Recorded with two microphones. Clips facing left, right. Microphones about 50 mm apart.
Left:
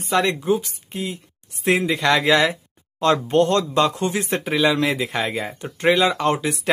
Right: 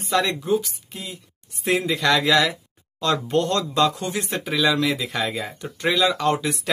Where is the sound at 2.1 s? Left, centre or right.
Left.